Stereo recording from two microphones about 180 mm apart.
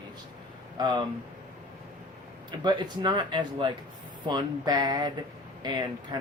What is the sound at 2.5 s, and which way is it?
Speech, 25° right (ahead or behind).